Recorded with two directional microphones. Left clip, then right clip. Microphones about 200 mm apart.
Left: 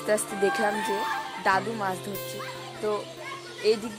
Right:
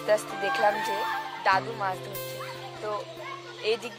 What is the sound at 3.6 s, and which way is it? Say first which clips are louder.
Speech: left 4 dB; 25° right (ahead or behind).